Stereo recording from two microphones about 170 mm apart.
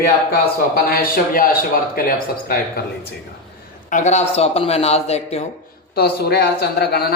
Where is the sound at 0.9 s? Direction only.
60° left (ahead or behind).